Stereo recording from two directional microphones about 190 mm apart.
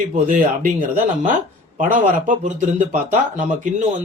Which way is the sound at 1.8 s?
40° right (ahead or behind).